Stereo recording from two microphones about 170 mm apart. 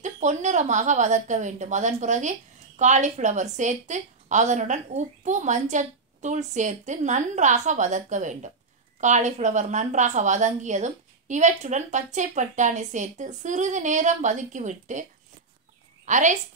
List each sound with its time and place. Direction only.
0.0 s a woman's voice: 45° right (ahead or behind)
16.1 s a woman's voice: 45° right (ahead or behind)